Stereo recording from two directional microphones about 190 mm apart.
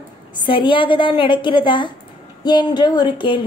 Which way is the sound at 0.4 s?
25° left (ahead or behind).